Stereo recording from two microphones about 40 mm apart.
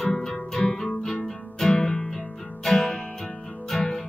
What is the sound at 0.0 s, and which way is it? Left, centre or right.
Music, centre.